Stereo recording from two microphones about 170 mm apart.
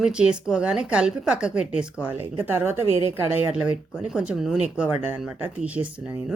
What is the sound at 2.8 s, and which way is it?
Speech, 35° left (ahead or behind).